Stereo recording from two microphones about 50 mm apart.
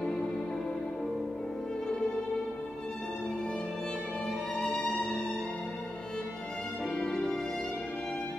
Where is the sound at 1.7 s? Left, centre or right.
Centre.